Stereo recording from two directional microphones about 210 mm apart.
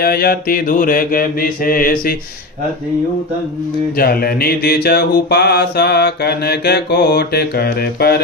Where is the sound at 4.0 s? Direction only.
45° left (ahead or behind).